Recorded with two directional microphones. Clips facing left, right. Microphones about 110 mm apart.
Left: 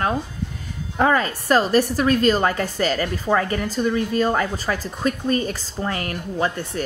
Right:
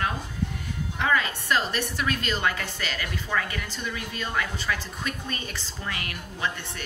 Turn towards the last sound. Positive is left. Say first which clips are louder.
# left 8 dB
turn(degrees=40)  # may be behind; listen again after turning